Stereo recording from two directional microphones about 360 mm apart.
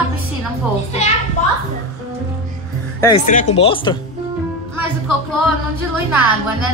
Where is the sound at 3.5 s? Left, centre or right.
Centre.